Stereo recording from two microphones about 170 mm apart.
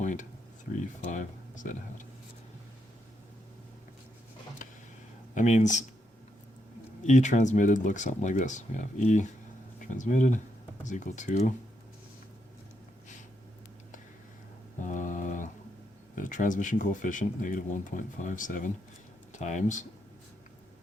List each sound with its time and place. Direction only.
0.0 s a sound: 45° left (ahead or behind)
1.1 s speech: 50° left (ahead or behind)
5.3 s speech: 45° left (ahead or behind)
7.0 s speech: 45° left (ahead or behind)
14.8 s a sound: 50° left (ahead or behind)
16.1 s speech: 50° left (ahead or behind)